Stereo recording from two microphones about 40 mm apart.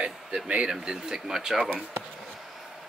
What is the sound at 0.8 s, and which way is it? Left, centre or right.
Speech, centre.